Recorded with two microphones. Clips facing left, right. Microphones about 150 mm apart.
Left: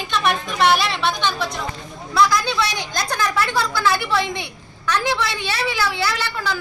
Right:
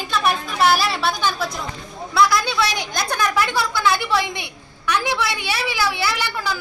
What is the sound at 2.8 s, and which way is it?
A woman's voice, 15° right (ahead or behind).